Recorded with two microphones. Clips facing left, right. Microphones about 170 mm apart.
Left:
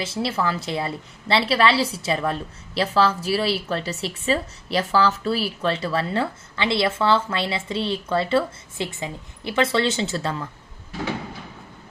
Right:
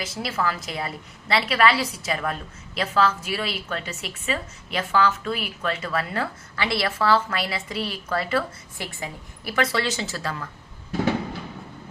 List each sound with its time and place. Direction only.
0.0 s a woman's voice: 30° left (ahead or behind)